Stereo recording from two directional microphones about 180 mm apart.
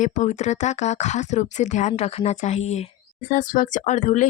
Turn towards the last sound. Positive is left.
turn(degrees=40)  # may be behind; listen again after turning